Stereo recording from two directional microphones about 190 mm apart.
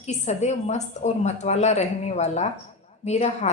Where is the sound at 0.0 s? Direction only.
35° left (ahead or behind).